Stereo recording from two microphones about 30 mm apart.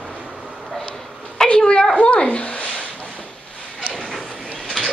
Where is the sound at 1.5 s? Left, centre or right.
Left.